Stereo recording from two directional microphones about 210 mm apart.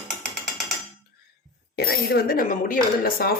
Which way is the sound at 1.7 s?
45° left (ahead or behind).